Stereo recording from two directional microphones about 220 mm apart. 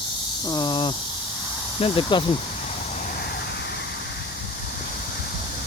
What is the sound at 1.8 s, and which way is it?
Speech, 20° left (ahead or behind).